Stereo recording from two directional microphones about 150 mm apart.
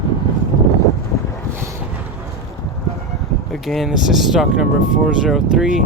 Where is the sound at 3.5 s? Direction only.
Centre (ahead or behind).